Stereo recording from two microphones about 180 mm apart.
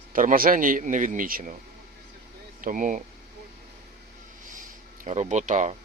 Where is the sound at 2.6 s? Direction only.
45° right (ahead or behind).